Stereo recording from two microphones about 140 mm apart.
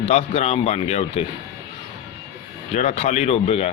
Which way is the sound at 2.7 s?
55° left (ahead or behind).